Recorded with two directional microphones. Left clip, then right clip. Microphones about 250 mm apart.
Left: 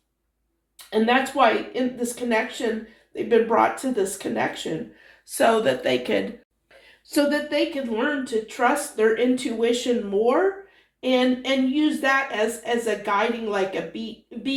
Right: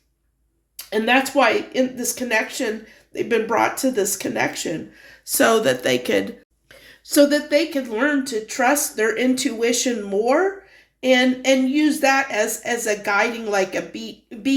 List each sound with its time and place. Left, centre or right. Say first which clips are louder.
0.9 s speech: right 2 dB; right
7.1 s speech: right 6 dB; right